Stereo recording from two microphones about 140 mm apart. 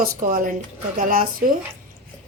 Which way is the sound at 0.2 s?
75° right (ahead or behind).